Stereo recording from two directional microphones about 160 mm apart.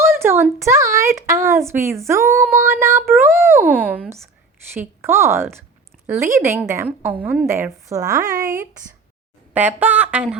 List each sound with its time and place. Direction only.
0.0 s a sound: 15° right (ahead or behind)
0.6 s a woman's voice: 20° right (ahead or behind)
9.5 s a woman's voice: 10° right (ahead or behind)